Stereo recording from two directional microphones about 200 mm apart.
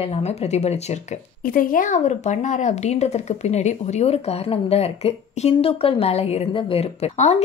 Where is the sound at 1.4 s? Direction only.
45° left (ahead or behind).